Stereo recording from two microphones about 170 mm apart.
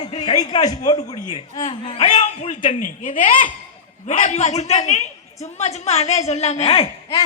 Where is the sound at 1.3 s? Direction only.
35° left (ahead or behind).